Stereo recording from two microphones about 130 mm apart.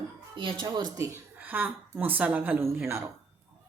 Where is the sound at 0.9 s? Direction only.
15° right (ahead or behind).